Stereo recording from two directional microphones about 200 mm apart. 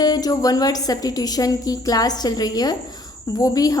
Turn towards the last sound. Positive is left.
turn(degrees=20)  # may be behind; listen again after turning